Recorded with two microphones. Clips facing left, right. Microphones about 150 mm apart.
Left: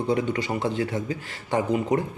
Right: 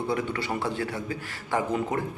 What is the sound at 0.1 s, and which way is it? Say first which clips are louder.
Speech: left 6 dB; 20° left (ahead or behind).